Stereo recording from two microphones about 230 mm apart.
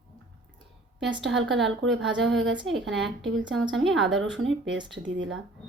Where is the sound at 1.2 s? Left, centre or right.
Right.